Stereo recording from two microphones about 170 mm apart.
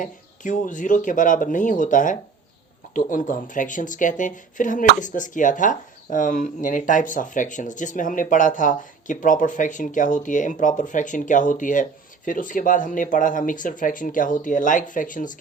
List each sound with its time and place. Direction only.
0.0 s speech: 50° left (ahead or behind)